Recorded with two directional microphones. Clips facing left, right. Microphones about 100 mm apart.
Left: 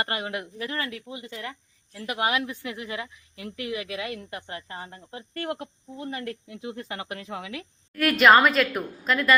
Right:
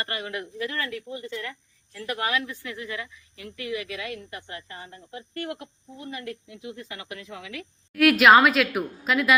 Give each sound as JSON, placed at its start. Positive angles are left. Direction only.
{"t": 0.0, "sound": "speech", "side_deg": 25}
{"t": 7.2, "sound": "speech", "side_deg": 45}
{"t": 7.9, "sound": "a woman's voice", "side_deg": -5}